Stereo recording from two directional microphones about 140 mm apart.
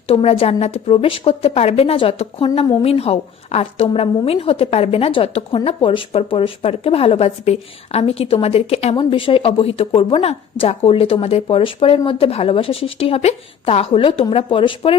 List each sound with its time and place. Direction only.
0.1 s speech: 45° left (ahead or behind)